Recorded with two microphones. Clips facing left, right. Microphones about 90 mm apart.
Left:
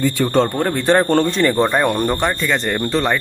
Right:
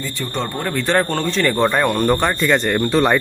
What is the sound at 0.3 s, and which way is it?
Speech, 35° left (ahead or behind).